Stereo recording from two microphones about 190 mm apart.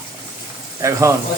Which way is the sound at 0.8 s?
15° right (ahead or behind).